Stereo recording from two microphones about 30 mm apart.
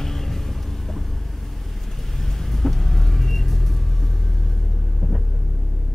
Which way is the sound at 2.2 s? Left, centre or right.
Centre.